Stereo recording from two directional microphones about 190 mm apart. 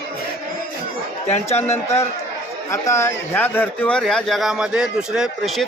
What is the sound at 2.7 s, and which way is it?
A man's voice, 15° left (ahead or behind).